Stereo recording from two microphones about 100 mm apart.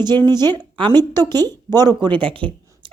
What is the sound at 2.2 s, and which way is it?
Speech, 60° right (ahead or behind).